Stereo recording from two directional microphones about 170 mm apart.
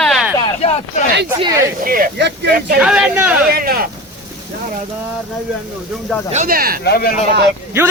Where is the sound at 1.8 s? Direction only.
55° right (ahead or behind).